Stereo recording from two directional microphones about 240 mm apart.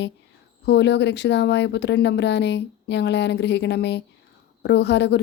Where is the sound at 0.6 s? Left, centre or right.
Left.